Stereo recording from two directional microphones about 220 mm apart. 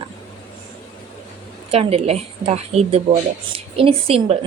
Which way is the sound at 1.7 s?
25° right (ahead or behind).